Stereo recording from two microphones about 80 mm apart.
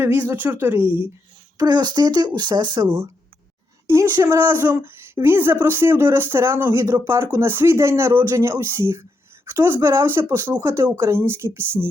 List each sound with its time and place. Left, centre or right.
0.0 s speech: right
1.5 s speech: right
4.2 s speech: right